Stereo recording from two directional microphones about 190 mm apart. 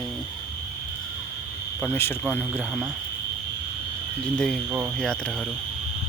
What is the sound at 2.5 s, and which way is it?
Speech, 5° right (ahead or behind).